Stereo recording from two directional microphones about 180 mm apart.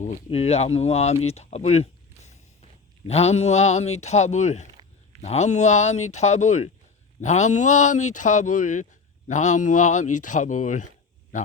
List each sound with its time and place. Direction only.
0.0 s speech: 35° left (ahead or behind)